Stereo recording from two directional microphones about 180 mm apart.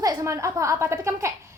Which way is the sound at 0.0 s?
20° right (ahead or behind).